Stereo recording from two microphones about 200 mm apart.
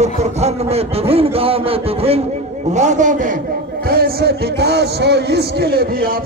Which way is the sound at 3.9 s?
50° right (ahead or behind).